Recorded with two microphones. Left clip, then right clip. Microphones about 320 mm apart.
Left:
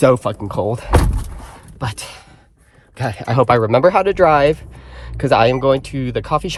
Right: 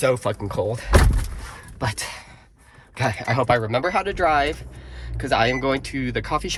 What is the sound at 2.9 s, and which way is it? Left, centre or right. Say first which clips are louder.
Speech: left 5 dB; centre.